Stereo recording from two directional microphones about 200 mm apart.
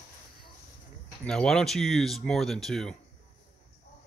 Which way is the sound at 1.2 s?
5° left (ahead or behind).